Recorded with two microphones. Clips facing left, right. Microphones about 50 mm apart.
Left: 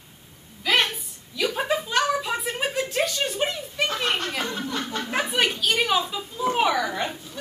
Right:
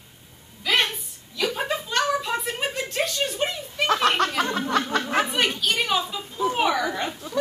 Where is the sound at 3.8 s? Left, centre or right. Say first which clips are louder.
Right 5 dB; right.